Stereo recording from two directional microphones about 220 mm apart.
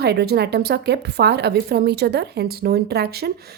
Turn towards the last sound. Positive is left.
turn(degrees=-45)  # may be behind; listen again after turning